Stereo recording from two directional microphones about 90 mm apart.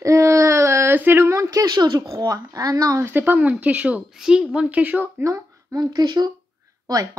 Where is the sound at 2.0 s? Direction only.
35° right (ahead or behind).